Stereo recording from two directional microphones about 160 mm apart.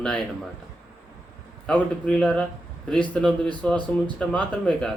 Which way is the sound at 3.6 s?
10° left (ahead or behind).